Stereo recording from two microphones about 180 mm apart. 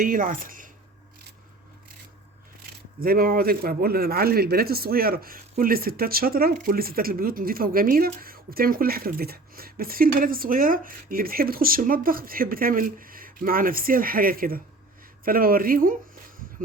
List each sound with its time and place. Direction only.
0.0 s speech: 50° right (ahead or behind)
3.0 s speech: 55° right (ahead or behind)